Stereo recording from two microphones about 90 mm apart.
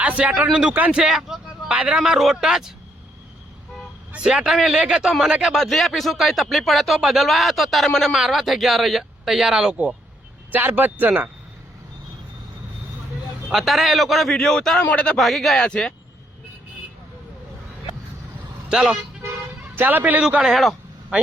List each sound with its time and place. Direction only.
0.0 s a man's voice: 15° right (ahead or behind)
4.1 s a man's voice: 10° right (ahead or behind)
10.5 s speech: 20° right (ahead or behind)
13.5 s speech: 5° right (ahead or behind); by 15.2 s 10° left (ahead or behind)
15.2 s speech: centre (ahead or behind)
18.7 s a man's voice: 10° right (ahead or behind)
19.7 s speech: 20° right (ahead or behind)
20.3 s speech: 5° right (ahead or behind)